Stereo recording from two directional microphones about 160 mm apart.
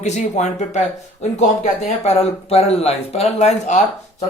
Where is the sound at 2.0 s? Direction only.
40° left (ahead or behind).